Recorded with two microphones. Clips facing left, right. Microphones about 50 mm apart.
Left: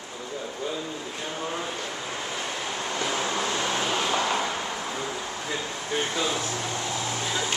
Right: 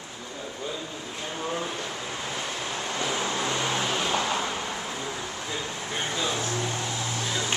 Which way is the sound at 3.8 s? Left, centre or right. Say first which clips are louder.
Left 1 dB; centre.